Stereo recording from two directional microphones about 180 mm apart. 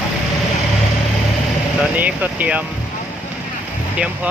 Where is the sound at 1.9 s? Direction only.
10° right (ahead or behind).